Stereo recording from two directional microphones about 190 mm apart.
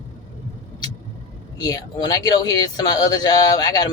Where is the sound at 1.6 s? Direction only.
20° left (ahead or behind).